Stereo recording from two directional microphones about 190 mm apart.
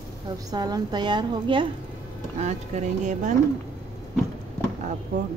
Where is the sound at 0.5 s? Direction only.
20° right (ahead or behind).